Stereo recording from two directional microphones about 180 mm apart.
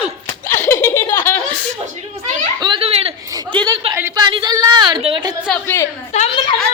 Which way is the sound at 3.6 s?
30° right (ahead or behind).